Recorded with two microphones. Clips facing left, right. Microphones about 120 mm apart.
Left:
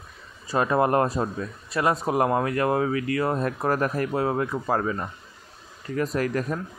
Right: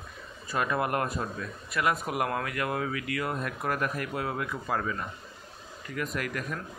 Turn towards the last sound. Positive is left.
turn(degrees=35)  # may be behind; listen again after turning